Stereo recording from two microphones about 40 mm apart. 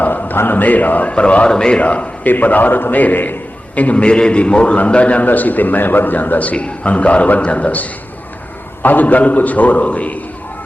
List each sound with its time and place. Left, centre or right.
0.0 s a sound: left
0.5 s a man's voice: left
1.1 s a man's voice: left
1.8 s a man's voice: left
2.2 s a man's voice: left
3.8 s a man's voice: left
4.0 s a man's voice: left
5.2 s a man's voice: left
8.8 s a man's voice: left